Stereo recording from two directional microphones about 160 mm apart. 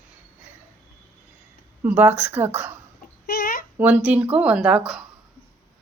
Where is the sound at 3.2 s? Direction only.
75° left (ahead or behind).